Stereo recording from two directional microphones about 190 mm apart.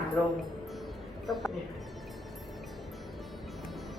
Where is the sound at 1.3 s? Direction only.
Centre (ahead or behind).